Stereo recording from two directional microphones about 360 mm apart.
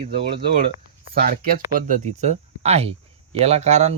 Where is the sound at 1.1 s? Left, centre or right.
Right.